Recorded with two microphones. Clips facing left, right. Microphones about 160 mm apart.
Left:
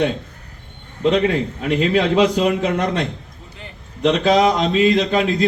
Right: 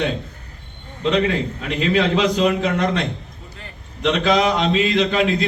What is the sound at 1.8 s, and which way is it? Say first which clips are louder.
Speech: left 2 dB; 45° left (ahead or behind).